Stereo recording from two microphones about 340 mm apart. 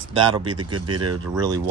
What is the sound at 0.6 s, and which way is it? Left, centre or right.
Speech, right.